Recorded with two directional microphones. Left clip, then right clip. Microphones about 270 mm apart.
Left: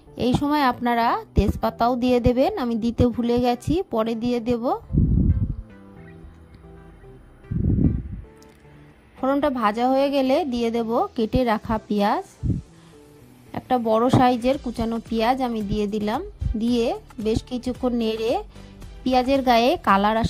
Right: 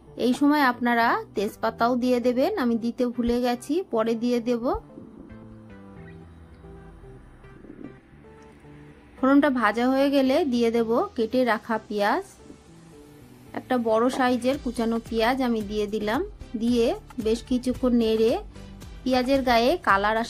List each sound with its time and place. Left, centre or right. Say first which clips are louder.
0.2 s a woman's voice: left 1 dB; left
9.2 s a woman's voice: even; left
13.5 s a woman's voice: left 3 dB; left